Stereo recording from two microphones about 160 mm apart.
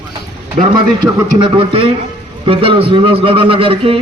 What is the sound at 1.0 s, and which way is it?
A man's voice, 30° right (ahead or behind).